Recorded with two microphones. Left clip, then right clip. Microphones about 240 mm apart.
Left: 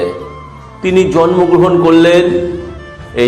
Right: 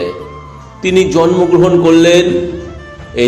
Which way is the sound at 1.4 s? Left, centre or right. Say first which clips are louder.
Even; centre.